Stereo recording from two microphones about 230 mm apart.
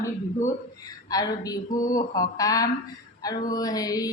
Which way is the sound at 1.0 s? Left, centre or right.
Centre.